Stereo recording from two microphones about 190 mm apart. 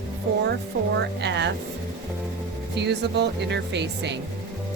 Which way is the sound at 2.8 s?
65° right (ahead or behind).